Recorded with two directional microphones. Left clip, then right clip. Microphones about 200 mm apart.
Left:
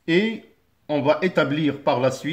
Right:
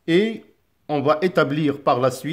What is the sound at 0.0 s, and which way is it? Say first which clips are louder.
Speech: right 2 dB; 40° right (ahead or behind).